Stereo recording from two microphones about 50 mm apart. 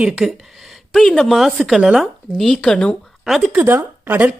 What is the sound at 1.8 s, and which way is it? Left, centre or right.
Speech, centre.